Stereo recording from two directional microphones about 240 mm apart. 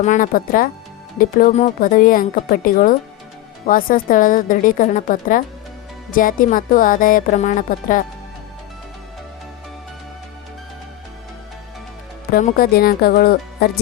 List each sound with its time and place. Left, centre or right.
0.0 s speech: left
12.3 s speech: left